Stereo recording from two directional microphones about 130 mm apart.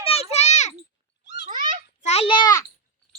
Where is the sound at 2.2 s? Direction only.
40° left (ahead or behind).